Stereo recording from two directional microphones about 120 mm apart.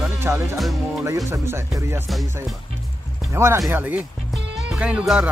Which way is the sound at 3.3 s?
20° right (ahead or behind).